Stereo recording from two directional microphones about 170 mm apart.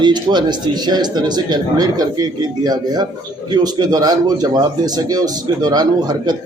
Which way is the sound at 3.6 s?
25° right (ahead or behind).